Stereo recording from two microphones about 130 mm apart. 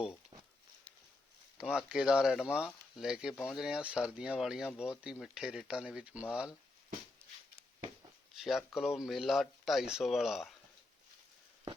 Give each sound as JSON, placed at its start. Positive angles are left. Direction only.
{"t": 1.5, "sound": "speech", "side_deg": -5}
{"t": 8.4, "sound": "speech", "side_deg": 0}